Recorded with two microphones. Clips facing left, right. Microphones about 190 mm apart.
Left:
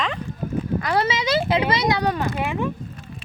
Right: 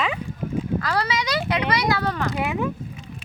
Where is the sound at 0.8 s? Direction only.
25° left (ahead or behind).